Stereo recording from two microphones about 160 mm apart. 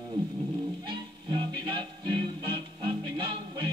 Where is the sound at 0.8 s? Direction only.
30° right (ahead or behind).